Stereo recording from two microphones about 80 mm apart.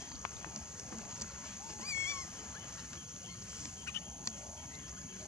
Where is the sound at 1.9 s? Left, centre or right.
Left.